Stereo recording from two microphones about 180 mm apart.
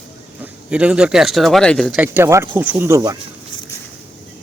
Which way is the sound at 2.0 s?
15° right (ahead or behind).